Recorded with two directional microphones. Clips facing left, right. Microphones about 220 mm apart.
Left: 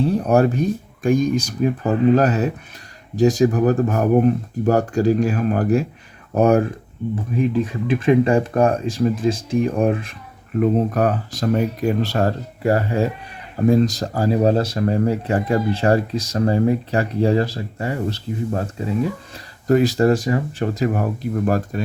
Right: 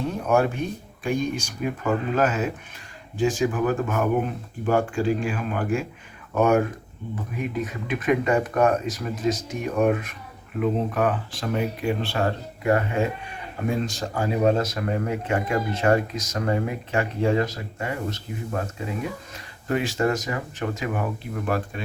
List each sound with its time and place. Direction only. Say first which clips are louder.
0.0 s speech: left 6 dB; 35° left (ahead or behind)
10.6 s speech: left 5 dB; 40° left (ahead or behind)